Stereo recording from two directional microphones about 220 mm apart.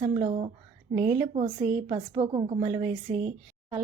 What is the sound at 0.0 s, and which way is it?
A woman's voice, 25° right (ahead or behind).